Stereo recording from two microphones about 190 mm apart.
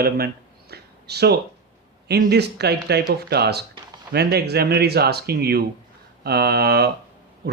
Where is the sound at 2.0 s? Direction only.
60° right (ahead or behind).